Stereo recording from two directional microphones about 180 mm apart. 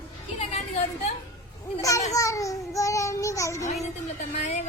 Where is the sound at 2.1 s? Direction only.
20° left (ahead or behind).